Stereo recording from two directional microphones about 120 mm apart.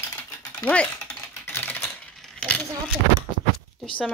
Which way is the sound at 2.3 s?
10° left (ahead or behind).